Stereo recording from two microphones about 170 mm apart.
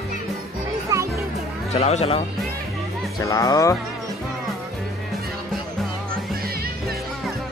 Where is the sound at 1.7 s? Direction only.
40° left (ahead or behind).